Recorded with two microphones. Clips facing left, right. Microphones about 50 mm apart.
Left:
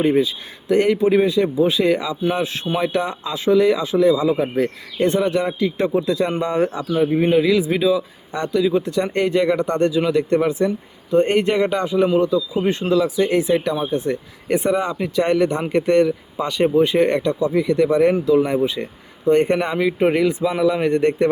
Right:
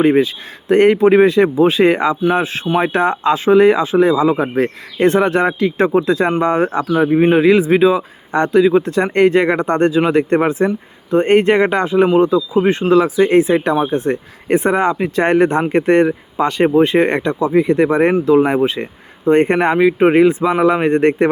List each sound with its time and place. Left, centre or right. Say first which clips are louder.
0.0 s speech: right 5 dB; right
6.7 s speech: right 5 dB; right
10.7 s speech: right 3 dB; right
11.3 s speech: right 6 dB; right
19.2 s speech: right 4 dB; right